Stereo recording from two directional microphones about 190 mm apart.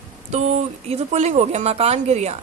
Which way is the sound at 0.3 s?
35° right (ahead or behind).